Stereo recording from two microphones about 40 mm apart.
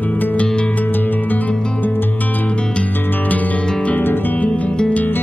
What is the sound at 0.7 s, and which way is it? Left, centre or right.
Music, left.